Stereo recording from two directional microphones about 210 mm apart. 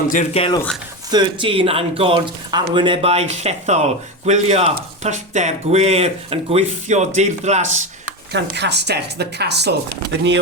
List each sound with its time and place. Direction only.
0.1 s speech: 30° left (ahead or behind)
1.1 s speech: 25° right (ahead or behind)
8.3 s a woman's voice: 55° right (ahead or behind)